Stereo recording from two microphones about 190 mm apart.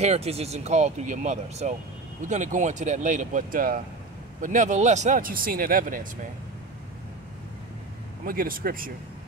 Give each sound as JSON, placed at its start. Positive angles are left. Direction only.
{"t": 0.0, "sound": "speech", "side_deg": -35}
{"t": 8.3, "sound": "speech", "side_deg": -50}